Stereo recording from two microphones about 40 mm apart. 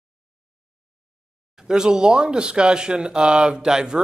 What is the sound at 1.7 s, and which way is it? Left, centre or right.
Speech, centre.